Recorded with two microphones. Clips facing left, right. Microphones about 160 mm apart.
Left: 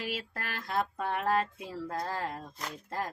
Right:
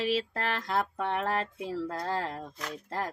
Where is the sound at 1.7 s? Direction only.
70° right (ahead or behind).